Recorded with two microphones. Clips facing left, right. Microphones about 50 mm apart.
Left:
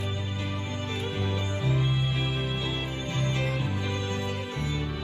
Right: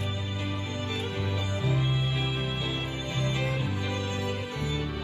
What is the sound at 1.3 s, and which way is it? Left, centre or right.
Music, centre.